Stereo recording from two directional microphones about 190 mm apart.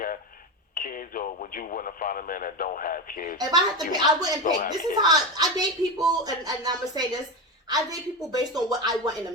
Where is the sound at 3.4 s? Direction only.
20° right (ahead or behind).